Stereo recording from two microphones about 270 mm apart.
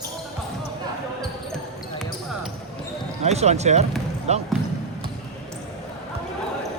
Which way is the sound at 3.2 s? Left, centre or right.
Right.